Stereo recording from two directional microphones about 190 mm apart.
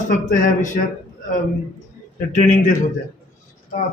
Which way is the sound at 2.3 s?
40° left (ahead or behind).